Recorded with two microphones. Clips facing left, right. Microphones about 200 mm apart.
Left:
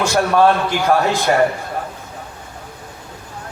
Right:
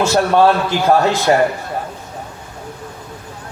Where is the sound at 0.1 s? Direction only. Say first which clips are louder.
Even; 25° right (ahead or behind).